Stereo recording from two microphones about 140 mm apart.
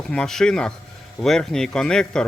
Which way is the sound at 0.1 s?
5° left (ahead or behind).